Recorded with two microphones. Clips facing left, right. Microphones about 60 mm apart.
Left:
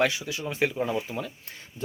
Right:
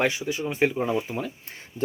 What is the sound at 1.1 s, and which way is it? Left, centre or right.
Speech, right.